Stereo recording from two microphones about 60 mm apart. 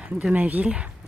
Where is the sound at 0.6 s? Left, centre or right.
Centre.